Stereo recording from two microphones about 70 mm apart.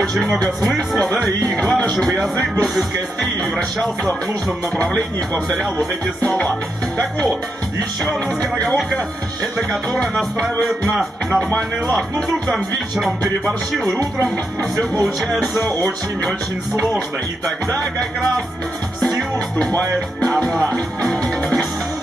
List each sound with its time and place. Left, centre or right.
0.0 s speech: centre
0.7 s music: centre
6.2 s speech: centre
8.6 s music: centre
15.6 s music: centre
18.9 s music: centre